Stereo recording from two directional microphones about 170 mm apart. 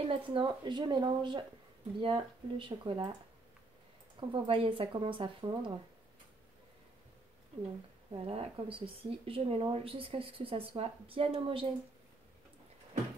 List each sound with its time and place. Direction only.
0.0 s a woman's voice: 30° right (ahead or behind)
4.2 s speech: 30° right (ahead or behind)
8.1 s speech: 35° right (ahead or behind)